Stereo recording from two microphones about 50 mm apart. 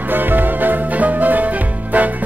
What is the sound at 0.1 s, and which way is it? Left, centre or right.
Music, right.